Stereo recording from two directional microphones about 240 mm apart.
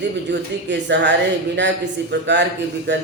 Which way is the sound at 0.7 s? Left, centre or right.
Right.